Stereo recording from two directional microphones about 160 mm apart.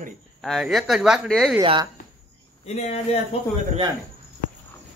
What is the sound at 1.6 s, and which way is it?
Speech, 30° right (ahead or behind).